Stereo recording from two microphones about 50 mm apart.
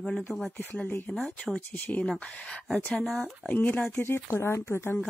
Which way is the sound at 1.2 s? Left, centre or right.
Left.